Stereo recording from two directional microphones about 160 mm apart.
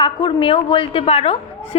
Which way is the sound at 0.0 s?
30° left (ahead or behind).